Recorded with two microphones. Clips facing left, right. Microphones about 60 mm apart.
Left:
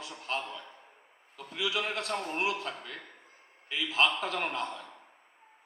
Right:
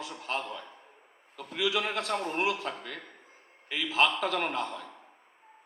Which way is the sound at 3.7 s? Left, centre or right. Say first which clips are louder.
Right 2 dB; right.